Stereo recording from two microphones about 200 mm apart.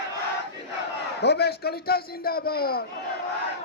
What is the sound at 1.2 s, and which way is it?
Speech, 55° left (ahead or behind).